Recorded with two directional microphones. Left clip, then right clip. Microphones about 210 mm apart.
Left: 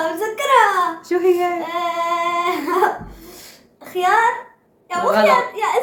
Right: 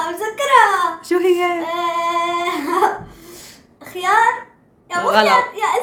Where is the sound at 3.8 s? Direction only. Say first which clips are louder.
Left 1 dB; 5° right (ahead or behind).